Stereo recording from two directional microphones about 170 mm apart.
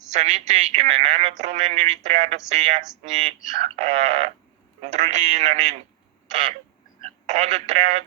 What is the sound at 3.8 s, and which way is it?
Speech, 40° right (ahead or behind).